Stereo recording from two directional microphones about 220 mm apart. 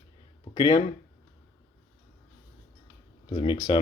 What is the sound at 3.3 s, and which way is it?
Speech, 20° left (ahead or behind).